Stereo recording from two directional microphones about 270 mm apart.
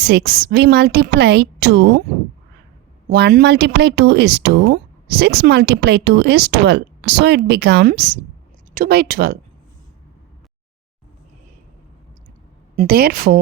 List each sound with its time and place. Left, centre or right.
0.0 s speech: right
3.1 s speech: right
12.7 s speech: right